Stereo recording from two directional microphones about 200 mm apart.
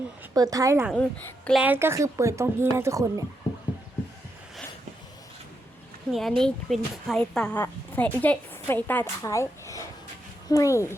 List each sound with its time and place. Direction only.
0.2 s speech: 15° right (ahead or behind)
0.9 s a woman's voice: 5° left (ahead or behind)
1.6 s speech: 10° right (ahead or behind)
6.1 s speech: centre (ahead or behind)